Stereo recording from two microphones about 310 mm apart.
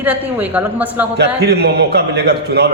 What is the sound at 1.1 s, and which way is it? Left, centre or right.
A man's voice, right.